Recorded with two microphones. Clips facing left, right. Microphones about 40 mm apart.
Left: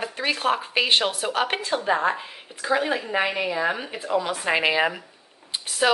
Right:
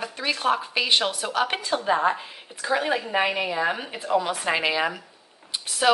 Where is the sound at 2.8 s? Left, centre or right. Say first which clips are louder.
Even; centre.